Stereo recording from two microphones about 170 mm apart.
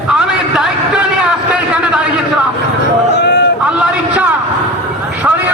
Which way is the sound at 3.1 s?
90° left.